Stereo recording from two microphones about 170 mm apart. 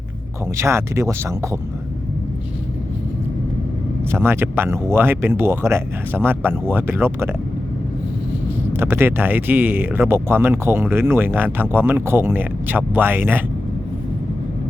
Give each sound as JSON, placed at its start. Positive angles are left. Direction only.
{"t": 0.5, "sound": "speech", "side_deg": -15}
{"t": 4.1, "sound": "speech", "side_deg": -15}
{"t": 8.7, "sound": "speech", "side_deg": -15}